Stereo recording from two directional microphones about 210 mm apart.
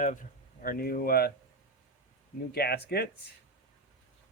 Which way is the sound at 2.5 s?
50° left (ahead or behind).